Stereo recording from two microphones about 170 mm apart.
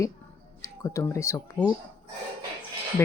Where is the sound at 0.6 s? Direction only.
20° left (ahead or behind).